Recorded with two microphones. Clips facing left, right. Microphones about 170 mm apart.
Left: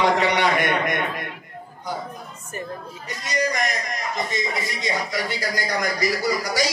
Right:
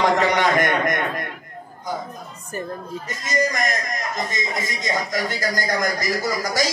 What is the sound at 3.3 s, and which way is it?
A man's voice, 45° right (ahead or behind).